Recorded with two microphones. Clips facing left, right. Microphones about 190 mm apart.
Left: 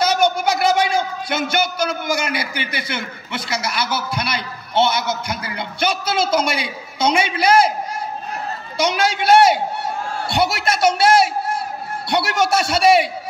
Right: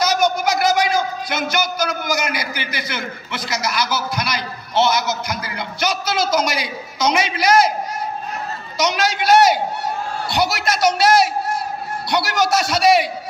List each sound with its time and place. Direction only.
0.0 s a man's voice: 30° left (ahead or behind)
8.7 s a man's voice: 30° left (ahead or behind)